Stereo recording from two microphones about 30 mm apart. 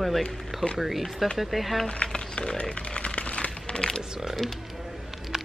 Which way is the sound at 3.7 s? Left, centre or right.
Left.